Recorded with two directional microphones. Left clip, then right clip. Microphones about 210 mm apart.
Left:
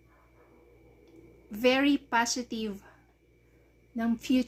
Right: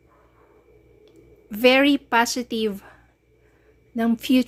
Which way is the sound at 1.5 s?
35° right (ahead or behind).